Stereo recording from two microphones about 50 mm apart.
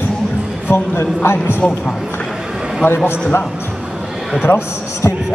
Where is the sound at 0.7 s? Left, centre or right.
Left.